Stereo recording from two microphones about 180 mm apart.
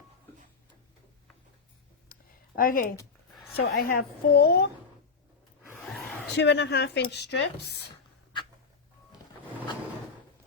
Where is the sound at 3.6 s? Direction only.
55° left (ahead or behind).